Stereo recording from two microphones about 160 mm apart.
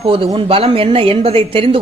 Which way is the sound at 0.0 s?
30° right (ahead or behind).